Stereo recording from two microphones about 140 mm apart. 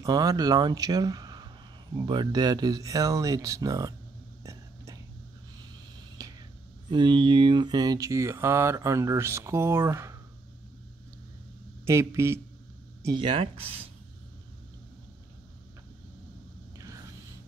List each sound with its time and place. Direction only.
0.0 s speech: 25° right (ahead or behind)
4.4 s a sound: 20° right (ahead or behind)
6.2 s whispering: 25° right (ahead or behind)
6.9 s speech: 35° right (ahead or behind); by 10.1 s 20° right (ahead or behind)
11.8 s speech: 20° right (ahead or behind)
13.0 s speech: 35° right (ahead or behind)
16.7 s a sound: 25° right (ahead or behind)